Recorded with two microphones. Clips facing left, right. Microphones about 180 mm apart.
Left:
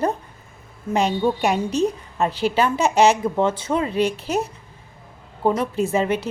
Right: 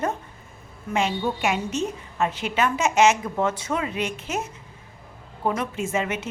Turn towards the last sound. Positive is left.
turn(degrees=35)  # may be behind; listen again after turning